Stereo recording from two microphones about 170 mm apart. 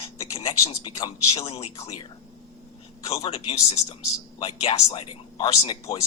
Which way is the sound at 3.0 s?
35° left (ahead or behind).